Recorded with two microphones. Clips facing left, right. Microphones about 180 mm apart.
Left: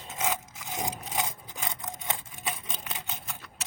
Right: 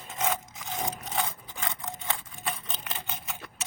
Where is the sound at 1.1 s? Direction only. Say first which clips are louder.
Right 2 dB; 20° left (ahead or behind).